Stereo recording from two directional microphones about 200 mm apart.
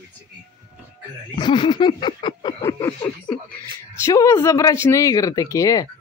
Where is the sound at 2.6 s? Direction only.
15° left (ahead or behind).